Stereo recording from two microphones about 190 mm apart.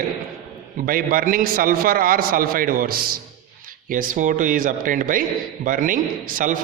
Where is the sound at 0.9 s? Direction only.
50° right (ahead or behind).